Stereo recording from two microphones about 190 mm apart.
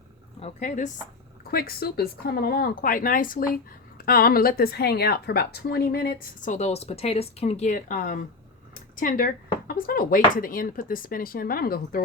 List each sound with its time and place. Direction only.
0.3 s speech: 35° left (ahead or behind)
1.5 s speech: 50° left (ahead or behind)
8.7 s a sound: 45° left (ahead or behind)
9.6 s speech: 50° left (ahead or behind)